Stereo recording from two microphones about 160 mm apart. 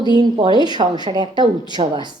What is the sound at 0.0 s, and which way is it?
A woman's voice, 25° right (ahead or behind).